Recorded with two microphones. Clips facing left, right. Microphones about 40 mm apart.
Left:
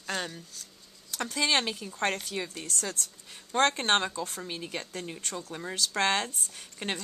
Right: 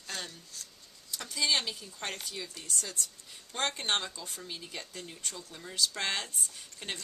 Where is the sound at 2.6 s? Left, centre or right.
Left.